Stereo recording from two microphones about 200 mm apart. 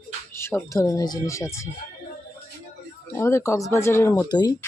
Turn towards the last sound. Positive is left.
turn(degrees=20)  # may be behind; listen again after turning